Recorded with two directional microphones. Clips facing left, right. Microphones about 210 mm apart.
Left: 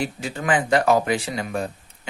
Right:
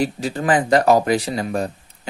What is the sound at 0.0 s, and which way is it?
Speech, 35° right (ahead or behind).